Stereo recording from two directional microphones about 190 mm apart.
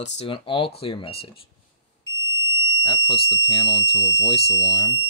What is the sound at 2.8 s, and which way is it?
Speech, 25° left (ahead or behind).